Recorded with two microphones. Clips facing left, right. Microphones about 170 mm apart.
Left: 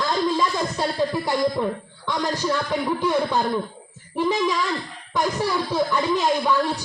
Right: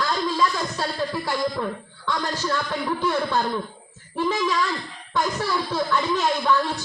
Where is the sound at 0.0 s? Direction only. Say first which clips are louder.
Left 1 dB; 20° left (ahead or behind).